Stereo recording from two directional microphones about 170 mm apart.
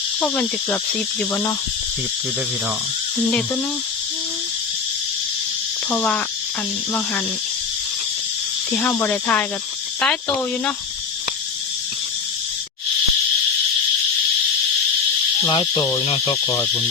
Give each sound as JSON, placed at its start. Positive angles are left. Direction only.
{"t": 5.9, "sound": "speech", "side_deg": 10}
{"t": 8.7, "sound": "speech", "side_deg": 10}
{"t": 15.4, "sound": "speech", "side_deg": 30}